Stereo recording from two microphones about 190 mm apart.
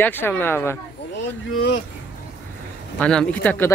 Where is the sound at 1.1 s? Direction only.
70° left (ahead or behind).